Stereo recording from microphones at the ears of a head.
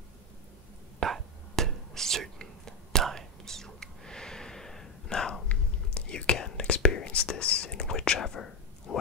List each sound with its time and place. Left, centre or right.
0.9 s whispering: right
4.0 s a sound: centre
5.1 s whispering: left